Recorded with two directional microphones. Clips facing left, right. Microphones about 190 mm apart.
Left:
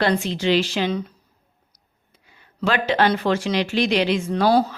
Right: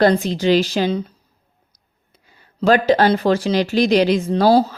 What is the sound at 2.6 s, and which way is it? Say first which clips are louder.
Speech: right 6 dB; 40° right (ahead or behind).